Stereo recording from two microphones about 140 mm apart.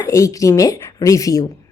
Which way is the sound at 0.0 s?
25° left (ahead or behind).